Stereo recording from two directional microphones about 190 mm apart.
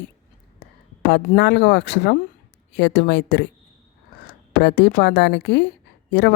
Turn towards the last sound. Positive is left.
turn(degrees=65)  # may be behind; listen again after turning